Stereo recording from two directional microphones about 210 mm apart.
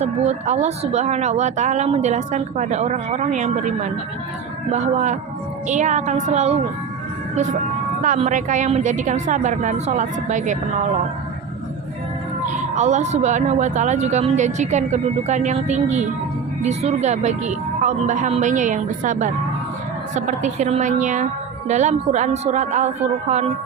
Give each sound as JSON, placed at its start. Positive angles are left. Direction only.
{"t": 0.0, "sound": "speech", "side_deg": -30}
{"t": 8.0, "sound": "speech", "side_deg": -35}
{"t": 12.5, "sound": "speech", "side_deg": -35}